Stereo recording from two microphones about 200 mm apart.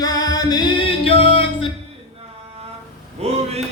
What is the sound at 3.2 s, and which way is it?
Speech, 30° right (ahead or behind).